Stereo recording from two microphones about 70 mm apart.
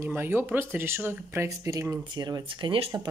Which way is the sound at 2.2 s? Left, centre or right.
Right.